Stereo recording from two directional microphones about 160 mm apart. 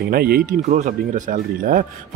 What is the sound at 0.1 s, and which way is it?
Speech, 70° right (ahead or behind).